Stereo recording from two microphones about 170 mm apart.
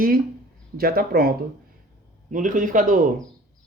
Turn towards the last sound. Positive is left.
turn(degrees=-55)  # may be behind; listen again after turning